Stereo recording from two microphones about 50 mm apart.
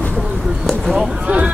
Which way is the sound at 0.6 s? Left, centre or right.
Centre.